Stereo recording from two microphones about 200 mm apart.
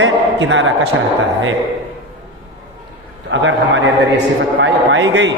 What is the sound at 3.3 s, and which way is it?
A man's voice, 70° right (ahead or behind).